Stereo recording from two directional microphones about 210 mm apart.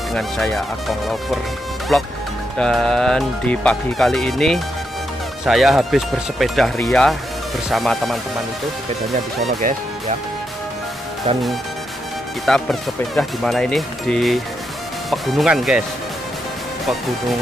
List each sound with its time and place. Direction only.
0.1 s speech: centre (ahead or behind)
9.6 s speech: 35° right (ahead or behind)
12.4 s speech: centre (ahead or behind)